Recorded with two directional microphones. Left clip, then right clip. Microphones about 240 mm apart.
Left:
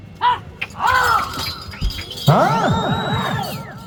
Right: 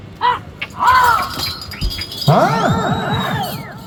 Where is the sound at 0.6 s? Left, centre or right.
Left.